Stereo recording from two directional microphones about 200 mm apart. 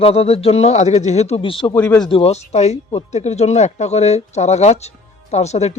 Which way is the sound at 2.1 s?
30° left (ahead or behind).